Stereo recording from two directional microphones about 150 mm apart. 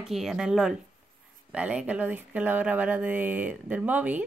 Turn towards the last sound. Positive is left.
turn(degrees=-10)  # may be behind; listen again after turning